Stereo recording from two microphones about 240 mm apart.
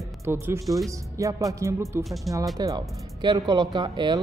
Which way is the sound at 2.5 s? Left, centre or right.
Centre.